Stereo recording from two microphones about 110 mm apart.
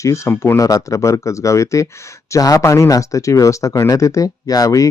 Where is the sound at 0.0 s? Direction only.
30° left (ahead or behind).